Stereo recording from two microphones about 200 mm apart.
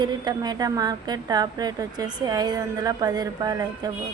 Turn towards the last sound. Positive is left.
turn(degrees=-20)  # may be behind; listen again after turning